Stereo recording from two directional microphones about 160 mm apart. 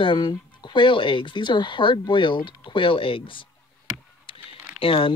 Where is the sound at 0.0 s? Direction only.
30° left (ahead or behind).